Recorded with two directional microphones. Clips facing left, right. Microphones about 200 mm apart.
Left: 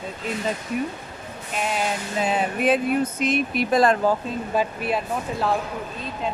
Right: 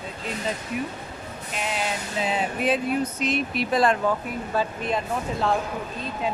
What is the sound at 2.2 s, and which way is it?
Speech, 50° left (ahead or behind).